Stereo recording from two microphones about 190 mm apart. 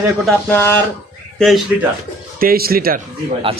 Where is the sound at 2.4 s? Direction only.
50° right (ahead or behind).